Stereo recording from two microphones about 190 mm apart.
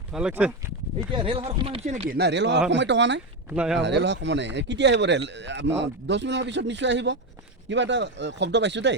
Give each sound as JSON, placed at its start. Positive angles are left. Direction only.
{"t": 0.1, "sound": "speech", "side_deg": -5}
{"t": 1.1, "sound": "speech", "side_deg": -30}
{"t": 2.1, "sound": "speech", "side_deg": -65}
{"t": 3.5, "sound": "speech", "side_deg": -5}
{"t": 3.8, "sound": "speech", "side_deg": -65}